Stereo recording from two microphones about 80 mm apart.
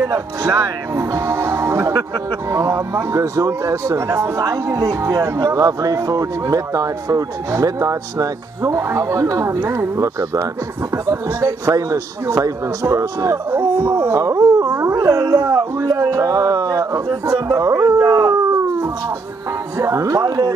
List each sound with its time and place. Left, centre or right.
0.1 s speech: right
0.9 s speech: right
13.5 s speech: right
14.2 s a sound: right
19.8 s speech: right